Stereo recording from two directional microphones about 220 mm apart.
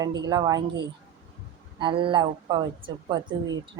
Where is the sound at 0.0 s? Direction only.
20° right (ahead or behind).